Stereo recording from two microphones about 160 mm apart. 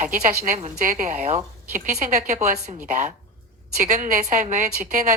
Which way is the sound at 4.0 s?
50° right (ahead or behind).